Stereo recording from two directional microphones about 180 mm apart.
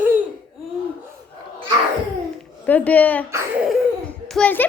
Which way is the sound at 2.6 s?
10° left (ahead or behind).